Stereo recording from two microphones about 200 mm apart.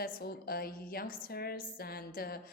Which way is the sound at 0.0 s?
50° left (ahead or behind).